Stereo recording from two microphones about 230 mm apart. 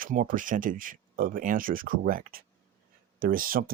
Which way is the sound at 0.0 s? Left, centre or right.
Right.